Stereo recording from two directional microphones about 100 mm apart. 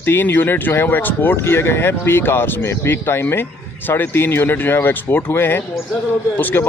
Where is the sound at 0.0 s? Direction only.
20° left (ahead or behind).